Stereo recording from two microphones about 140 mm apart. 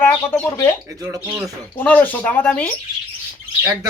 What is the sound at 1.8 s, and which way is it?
Speech, 10° left (ahead or behind).